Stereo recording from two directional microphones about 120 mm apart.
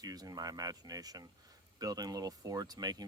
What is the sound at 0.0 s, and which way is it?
Speech, 30° right (ahead or behind).